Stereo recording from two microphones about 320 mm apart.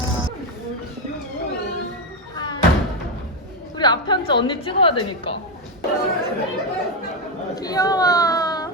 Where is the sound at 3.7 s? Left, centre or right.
Centre.